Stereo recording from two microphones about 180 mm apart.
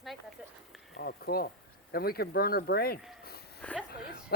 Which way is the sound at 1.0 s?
60° left (ahead or behind).